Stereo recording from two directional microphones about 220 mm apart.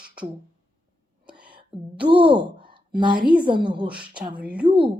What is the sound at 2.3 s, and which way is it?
Sigh, 20° right (ahead or behind).